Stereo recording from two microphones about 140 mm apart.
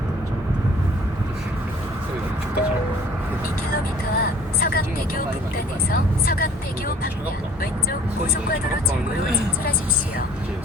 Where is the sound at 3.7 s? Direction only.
90° left.